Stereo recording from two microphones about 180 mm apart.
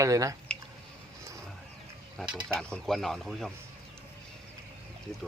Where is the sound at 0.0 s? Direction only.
20° right (ahead or behind).